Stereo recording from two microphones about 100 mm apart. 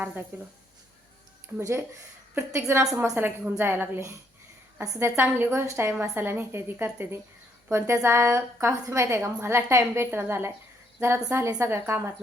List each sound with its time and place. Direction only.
0.3 s a woman's voice: 20° right (ahead or behind)
1.5 s a woman's voice: 25° right (ahead or behind)